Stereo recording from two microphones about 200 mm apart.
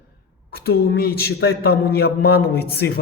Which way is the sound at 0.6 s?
50° left (ahead or behind).